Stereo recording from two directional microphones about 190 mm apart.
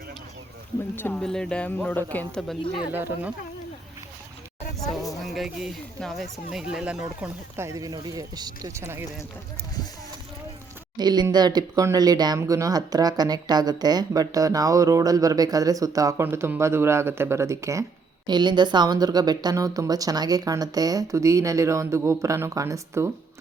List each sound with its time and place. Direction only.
0.9 s speech: 10° left (ahead or behind)
2.9 s speech: 10° right (ahead or behind)
5.2 s speech: centre (ahead or behind)
10.9 s speech: 20° right (ahead or behind)